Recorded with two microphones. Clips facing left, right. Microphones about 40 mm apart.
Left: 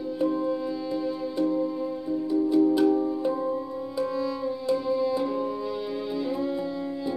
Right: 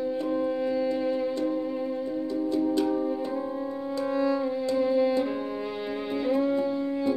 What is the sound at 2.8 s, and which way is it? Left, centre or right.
Music, centre.